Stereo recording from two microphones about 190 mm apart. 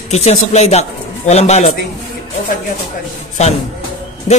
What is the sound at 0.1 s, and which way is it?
A man's voice, 35° left (ahead or behind).